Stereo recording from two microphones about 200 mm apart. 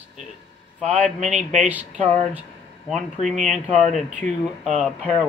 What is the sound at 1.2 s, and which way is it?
Speech, 35° right (ahead or behind).